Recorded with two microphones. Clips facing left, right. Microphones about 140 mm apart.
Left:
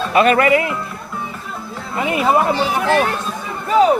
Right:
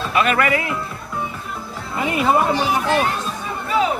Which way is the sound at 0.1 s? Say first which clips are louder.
Left 5 dB; 35° left (ahead or behind).